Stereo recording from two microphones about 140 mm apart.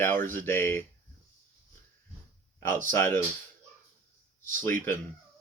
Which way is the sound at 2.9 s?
15° left (ahead or behind).